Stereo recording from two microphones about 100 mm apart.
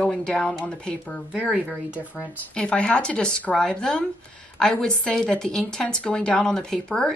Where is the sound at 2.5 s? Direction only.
10° left (ahead or behind).